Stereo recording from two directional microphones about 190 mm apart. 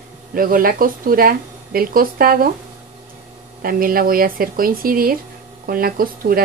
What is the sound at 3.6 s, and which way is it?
Speech, 50° right (ahead or behind).